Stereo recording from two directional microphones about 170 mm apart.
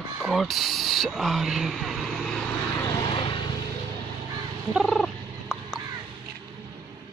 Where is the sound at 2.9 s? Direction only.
25° left (ahead or behind).